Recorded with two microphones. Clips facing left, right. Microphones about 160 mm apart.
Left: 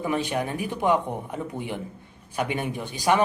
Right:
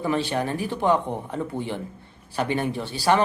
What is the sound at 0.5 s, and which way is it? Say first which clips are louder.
Speech: right 2 dB; 35° right (ahead or behind).